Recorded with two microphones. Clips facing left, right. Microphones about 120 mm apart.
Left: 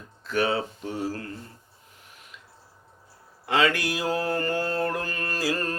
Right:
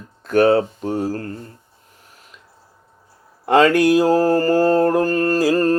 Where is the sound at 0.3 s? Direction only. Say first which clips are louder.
Right 11 dB; 45° right (ahead or behind).